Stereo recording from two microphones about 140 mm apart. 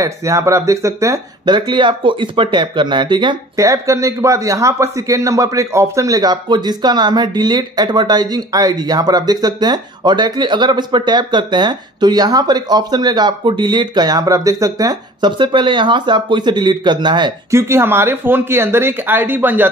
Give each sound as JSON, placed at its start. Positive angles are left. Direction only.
{"t": 0.0, "sound": "speech", "side_deg": -20}
{"t": 3.6, "sound": "a man's voice", "side_deg": -20}
{"t": 17.5, "sound": "speech", "side_deg": -20}